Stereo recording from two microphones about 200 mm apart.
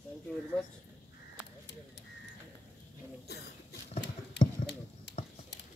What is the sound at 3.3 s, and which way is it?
Cough, 55° left (ahead or behind).